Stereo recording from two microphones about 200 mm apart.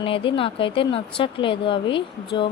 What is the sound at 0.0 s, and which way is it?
Speech, 25° left (ahead or behind).